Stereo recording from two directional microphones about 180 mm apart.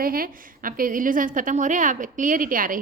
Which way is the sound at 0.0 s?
55° right (ahead or behind).